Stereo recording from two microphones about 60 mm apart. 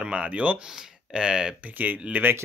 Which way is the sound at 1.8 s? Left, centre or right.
Right.